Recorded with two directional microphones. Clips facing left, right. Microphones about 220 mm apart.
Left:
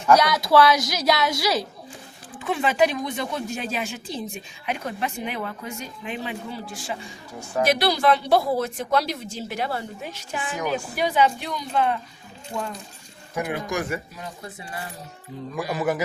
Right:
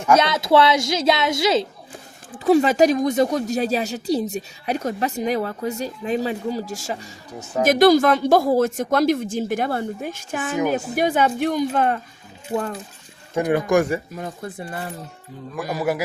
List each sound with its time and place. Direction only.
0.2 s a woman's voice: 25° right (ahead or behind)
2.3 s speech: 40° right (ahead or behind)
13.5 s speech: 50° right (ahead or behind)
15.7 s a man's voice: 10° right (ahead or behind)